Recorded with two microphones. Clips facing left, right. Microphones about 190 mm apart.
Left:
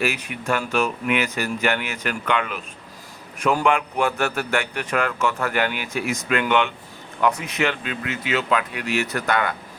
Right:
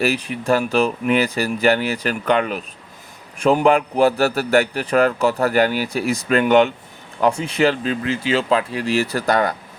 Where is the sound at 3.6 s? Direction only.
35° right (ahead or behind).